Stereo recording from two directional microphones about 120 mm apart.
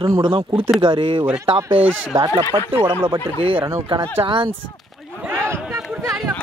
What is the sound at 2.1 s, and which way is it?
Speech, 25° right (ahead or behind).